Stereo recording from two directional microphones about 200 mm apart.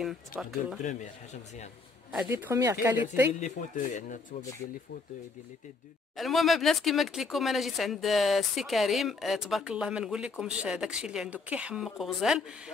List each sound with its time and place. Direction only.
0.0 s speech: centre (ahead or behind)
0.8 s speech: 35° left (ahead or behind)
2.1 s a woman's voice: 10° right (ahead or behind)
3.3 s speech: 40° left (ahead or behind)
6.1 s speech: centre (ahead or behind)